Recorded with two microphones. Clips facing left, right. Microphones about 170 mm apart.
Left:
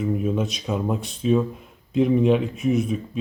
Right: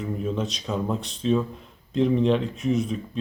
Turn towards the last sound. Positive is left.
turn(degrees=10)  # may be behind; listen again after turning